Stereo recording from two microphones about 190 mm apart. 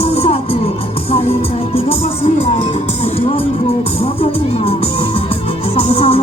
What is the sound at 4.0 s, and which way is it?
Music, 30° left (ahead or behind).